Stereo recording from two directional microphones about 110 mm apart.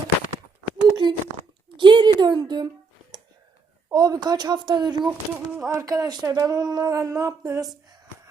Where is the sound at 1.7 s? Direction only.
45° right (ahead or behind).